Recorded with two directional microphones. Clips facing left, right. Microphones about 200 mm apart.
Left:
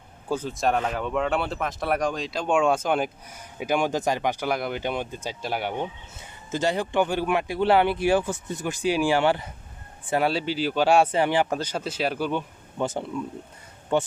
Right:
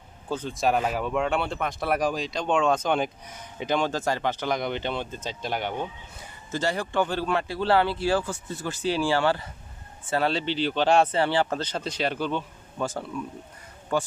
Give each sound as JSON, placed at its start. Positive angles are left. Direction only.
{"t": 0.3, "sound": "speech", "side_deg": 5}
{"t": 6.5, "sound": "speech", "side_deg": 20}